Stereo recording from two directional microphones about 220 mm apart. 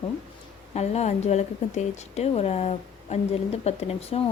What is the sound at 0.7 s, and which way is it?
A woman's voice, 30° left (ahead or behind).